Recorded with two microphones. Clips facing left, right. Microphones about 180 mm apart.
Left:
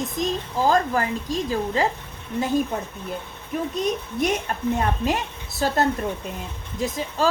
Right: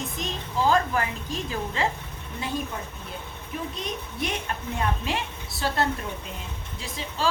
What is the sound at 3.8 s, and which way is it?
Speech, 45° left (ahead or behind).